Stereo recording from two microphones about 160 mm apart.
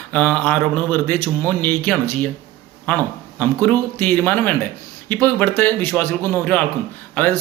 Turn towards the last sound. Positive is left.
turn(degrees=10)  # may be behind; listen again after turning